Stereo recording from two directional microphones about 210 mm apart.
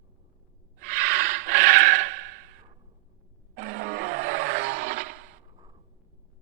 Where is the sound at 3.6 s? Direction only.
45° right (ahead or behind).